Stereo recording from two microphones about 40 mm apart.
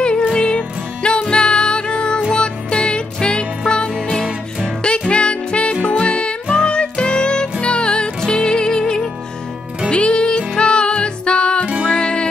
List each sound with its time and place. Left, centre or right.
0.0 s music: left
11.6 s music: right
11.9 s music: left